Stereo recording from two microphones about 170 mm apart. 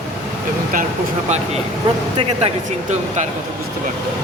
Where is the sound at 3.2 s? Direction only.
45° right (ahead or behind).